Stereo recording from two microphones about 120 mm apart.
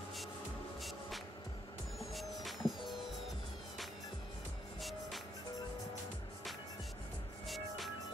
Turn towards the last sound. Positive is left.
turn(degrees=0)  # may be behind; listen again after turning